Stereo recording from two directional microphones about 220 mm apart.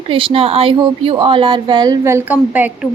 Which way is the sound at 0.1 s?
25° right (ahead or behind).